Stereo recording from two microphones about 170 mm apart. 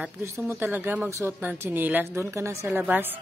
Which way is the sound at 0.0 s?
15° right (ahead or behind).